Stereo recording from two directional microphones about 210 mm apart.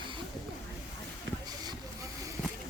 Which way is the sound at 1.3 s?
60° right (ahead or behind).